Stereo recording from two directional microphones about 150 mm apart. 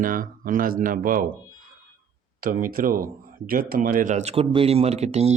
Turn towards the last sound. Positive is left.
turn(degrees=-45)  # may be behind; listen again after turning